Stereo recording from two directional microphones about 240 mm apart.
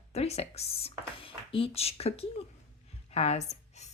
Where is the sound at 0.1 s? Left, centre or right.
Left.